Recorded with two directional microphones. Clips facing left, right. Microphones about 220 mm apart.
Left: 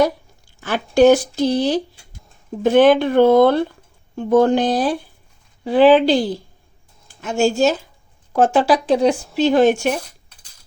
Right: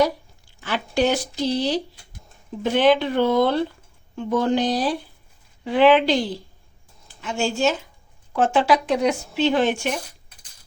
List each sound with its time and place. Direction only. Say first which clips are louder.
0.6 s speech: left 9 dB; 45° left (ahead or behind)
5.6 s speech: left 4 dB; 35° left (ahead or behind)